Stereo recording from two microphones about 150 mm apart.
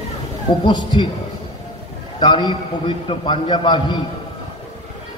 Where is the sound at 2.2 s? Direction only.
30° left (ahead or behind).